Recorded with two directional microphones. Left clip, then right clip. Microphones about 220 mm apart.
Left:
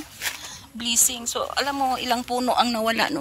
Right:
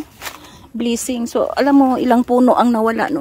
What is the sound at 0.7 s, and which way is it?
Speech, 45° right (ahead or behind).